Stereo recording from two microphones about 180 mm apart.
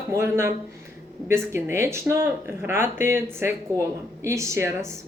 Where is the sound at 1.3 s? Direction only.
15° right (ahead or behind).